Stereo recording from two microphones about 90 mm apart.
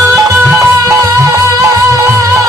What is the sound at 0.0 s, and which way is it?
Music, 35° right (ahead or behind).